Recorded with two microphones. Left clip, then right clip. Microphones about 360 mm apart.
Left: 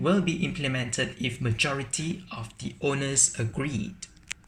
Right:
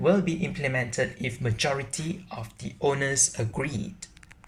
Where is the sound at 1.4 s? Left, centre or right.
Centre.